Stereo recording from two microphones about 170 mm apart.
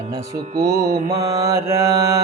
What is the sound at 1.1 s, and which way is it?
Mantra, 20° right (ahead or behind).